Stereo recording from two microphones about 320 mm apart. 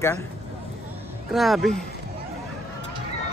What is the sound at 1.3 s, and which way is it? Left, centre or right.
Speech, centre.